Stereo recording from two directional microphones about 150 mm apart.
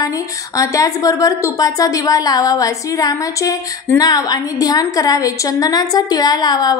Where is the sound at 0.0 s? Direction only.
20° left (ahead or behind).